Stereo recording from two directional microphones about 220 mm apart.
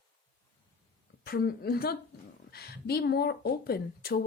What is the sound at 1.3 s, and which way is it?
A woman's voice, 45° left (ahead or behind).